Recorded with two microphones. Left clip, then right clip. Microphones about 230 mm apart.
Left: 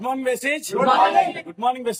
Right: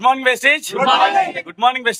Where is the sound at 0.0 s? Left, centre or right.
Right.